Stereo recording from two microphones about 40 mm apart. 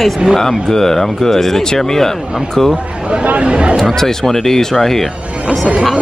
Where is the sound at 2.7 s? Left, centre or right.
Right.